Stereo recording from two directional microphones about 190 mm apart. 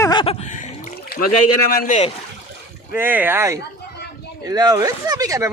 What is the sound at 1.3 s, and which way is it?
Speech, 45° left (ahead or behind).